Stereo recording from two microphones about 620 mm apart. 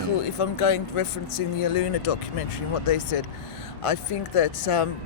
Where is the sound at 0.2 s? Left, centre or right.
Left.